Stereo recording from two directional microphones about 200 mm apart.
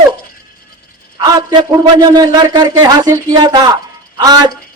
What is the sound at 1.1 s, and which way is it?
A man's voice, 20° right (ahead or behind).